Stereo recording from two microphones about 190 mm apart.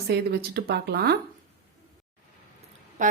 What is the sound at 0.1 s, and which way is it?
A woman's voice, 55° right (ahead or behind).